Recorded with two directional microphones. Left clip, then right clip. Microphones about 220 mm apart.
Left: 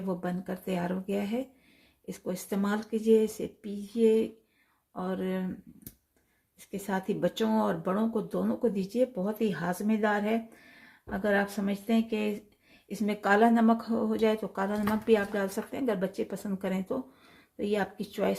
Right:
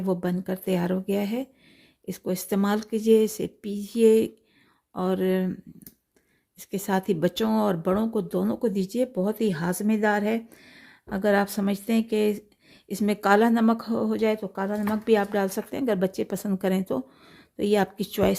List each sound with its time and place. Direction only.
0.0 s speech: 40° right (ahead or behind)
6.7 s speech: 40° right (ahead or behind)